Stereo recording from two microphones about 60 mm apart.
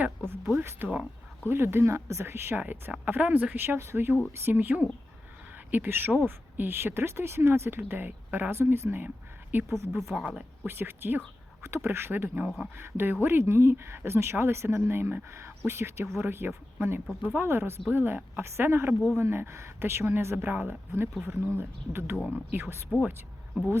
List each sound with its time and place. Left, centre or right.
0.6 s speech: right
2.6 s speech: right
7.8 s speech: right
9.6 s speech: right
10.1 s speech: right
10.7 s speech: right
22.9 s speech: centre